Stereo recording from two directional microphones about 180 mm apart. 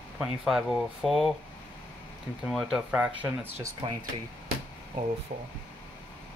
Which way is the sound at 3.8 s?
30° right (ahead or behind).